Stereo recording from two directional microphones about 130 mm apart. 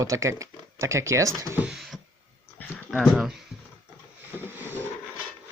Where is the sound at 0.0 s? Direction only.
25° right (ahead or behind).